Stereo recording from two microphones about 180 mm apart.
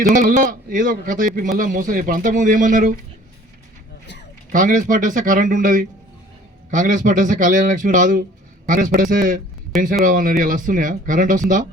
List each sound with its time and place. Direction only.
0.1 s speech: 45° right (ahead or behind)
4.5 s speech: 45° right (ahead or behind)